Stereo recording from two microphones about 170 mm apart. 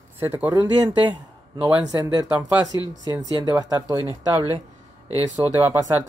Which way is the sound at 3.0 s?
25° right (ahead or behind).